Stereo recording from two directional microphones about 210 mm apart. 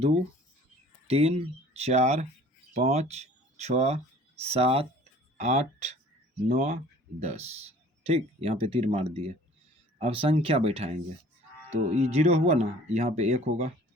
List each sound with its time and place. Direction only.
1.0 s speech: 30° right (ahead or behind)